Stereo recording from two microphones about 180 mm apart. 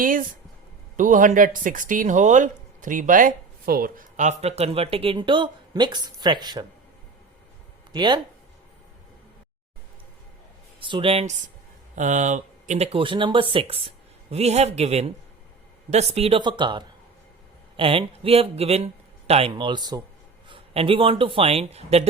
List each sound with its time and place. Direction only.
0.0 s speech: 50° right (ahead or behind); by 6.7 s 25° right (ahead or behind)
7.9 s speech: 25° right (ahead or behind)
10.8 s speech: 30° right (ahead or behind)